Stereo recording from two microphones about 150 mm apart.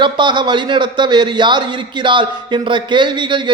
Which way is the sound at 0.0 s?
30° right (ahead or behind).